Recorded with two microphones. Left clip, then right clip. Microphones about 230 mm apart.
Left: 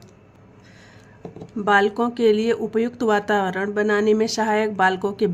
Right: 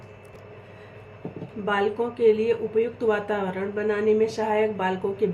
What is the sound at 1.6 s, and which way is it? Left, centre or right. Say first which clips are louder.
A woman's voice: left 6 dB; left.